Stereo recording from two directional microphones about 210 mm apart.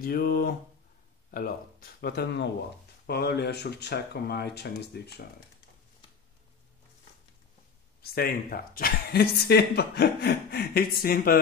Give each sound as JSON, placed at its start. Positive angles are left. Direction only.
{"t": 0.0, "sound": "speech", "side_deg": 45}
{"t": 8.0, "sound": "speech", "side_deg": 45}